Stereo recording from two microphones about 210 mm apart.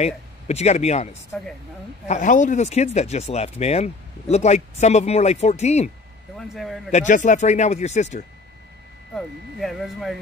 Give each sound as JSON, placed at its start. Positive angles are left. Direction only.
{"t": 0.0, "sound": "speech", "side_deg": 30}
{"t": 1.3, "sound": "speech", "side_deg": 5}
{"t": 2.0, "sound": "speech", "side_deg": 35}
{"t": 6.3, "sound": "speech", "side_deg": 0}
{"t": 6.9, "sound": "speech", "side_deg": 35}
{"t": 9.1, "sound": "speech", "side_deg": 0}